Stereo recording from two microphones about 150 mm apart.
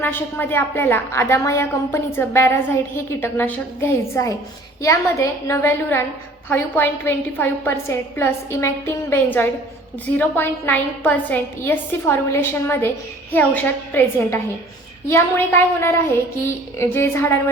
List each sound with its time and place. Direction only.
0.0 s a woman's voice: 15° left (ahead or behind)